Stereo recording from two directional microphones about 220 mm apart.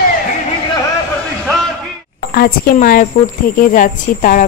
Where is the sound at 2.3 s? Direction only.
45° left (ahead or behind).